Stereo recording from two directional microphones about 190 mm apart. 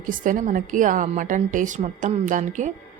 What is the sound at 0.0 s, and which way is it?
A woman's voice, 45° right (ahead or behind).